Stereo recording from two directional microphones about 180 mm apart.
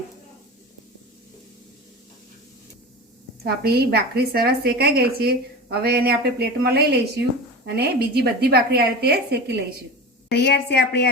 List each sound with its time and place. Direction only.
3.4 s a woman's voice: 60° right (ahead or behind)
10.2 s a woman's voice: 65° left (ahead or behind)